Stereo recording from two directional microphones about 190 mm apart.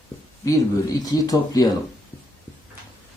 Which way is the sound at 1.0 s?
20° left (ahead or behind).